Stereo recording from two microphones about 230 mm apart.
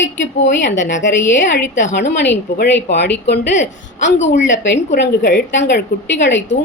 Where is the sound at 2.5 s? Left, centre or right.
Left.